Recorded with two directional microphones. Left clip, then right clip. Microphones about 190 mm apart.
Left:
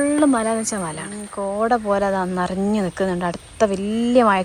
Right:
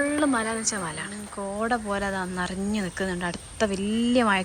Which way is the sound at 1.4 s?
10° right (ahead or behind).